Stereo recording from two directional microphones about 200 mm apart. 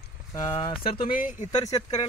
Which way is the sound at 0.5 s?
25° left (ahead or behind).